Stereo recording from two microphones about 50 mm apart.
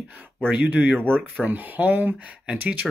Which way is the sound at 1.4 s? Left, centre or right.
Right.